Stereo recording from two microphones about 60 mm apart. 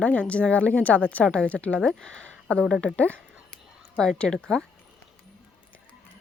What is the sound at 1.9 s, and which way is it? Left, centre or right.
Speech, centre.